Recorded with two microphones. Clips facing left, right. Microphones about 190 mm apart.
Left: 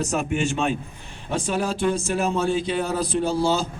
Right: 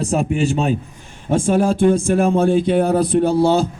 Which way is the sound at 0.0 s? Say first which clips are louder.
Right 5 dB; 35° right (ahead or behind).